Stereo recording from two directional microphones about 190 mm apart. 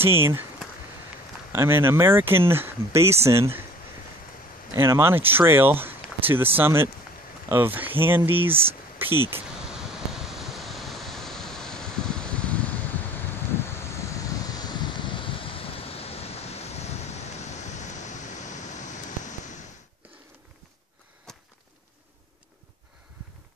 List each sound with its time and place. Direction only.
0.0 s speech: 10° right (ahead or behind)
1.5 s speech: 10° right (ahead or behind)
4.7 s speech: 15° right (ahead or behind)
8.9 s a sound: 10° right (ahead or behind)
10.2 s waves: centre (ahead or behind); by 19.6 s 40° left (ahead or behind)
21.3 s a sound: 5° left (ahead or behind)